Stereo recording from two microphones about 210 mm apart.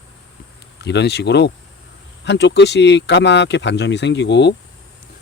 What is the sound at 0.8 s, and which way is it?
Speech, 55° left (ahead or behind).